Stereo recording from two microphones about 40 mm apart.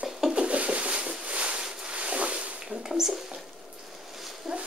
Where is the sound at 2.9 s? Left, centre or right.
Centre.